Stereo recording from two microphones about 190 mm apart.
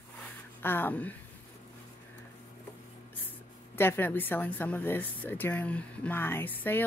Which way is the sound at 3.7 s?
10° left (ahead or behind).